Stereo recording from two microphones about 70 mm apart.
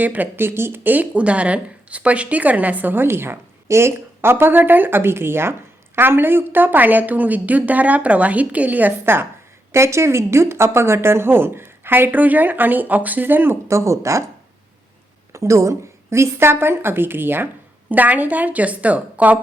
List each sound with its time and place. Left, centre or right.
0.0 s speech: right
9.7 s speech: right
13.7 s speech: right
15.3 s a woman's voice: right